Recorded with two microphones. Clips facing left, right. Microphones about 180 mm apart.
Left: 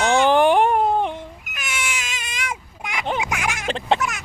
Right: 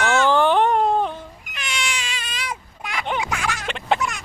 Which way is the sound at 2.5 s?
15° left (ahead or behind).